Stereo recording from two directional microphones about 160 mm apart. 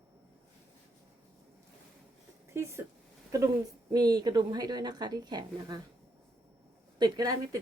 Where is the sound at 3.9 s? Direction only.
25° right (ahead or behind).